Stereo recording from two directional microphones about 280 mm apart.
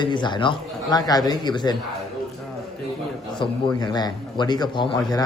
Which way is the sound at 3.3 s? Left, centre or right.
Centre.